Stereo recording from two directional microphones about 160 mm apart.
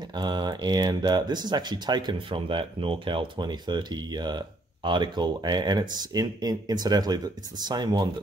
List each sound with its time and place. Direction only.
0.1 s speech: 25° right (ahead or behind)